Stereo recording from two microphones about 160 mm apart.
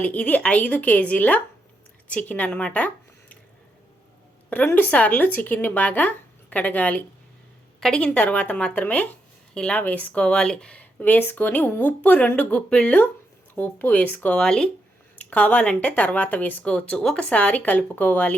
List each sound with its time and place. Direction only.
0.0 s speech: 10° left (ahead or behind)
4.4 s speech: 10° left (ahead or behind)